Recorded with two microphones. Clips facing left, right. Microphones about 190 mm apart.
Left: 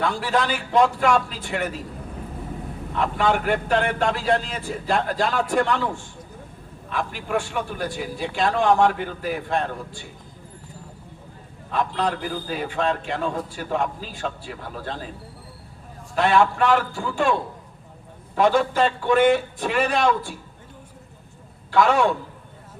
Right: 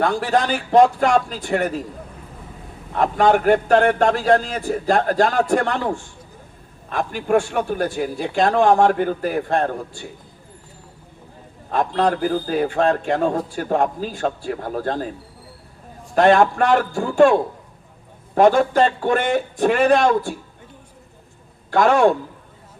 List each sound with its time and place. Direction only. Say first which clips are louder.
0.0 s a man's voice: right 4 dB; 45° right (ahead or behind)
2.9 s a man's voice: right 6 dB; 45° right (ahead or behind)
6.9 s a man's voice: right 7 dB; 50° right (ahead or behind)
11.7 s a man's voice: right 5 dB; 45° right (ahead or behind)
16.1 s a man's voice: right 5 dB; 45° right (ahead or behind)
21.7 s a man's voice: right 4 dB; 45° right (ahead or behind)